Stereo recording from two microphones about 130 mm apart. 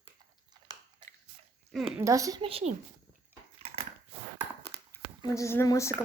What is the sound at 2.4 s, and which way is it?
Speech, 50° right (ahead or behind).